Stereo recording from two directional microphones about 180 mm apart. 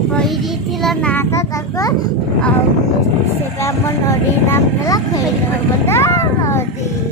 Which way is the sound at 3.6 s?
15° left (ahead or behind).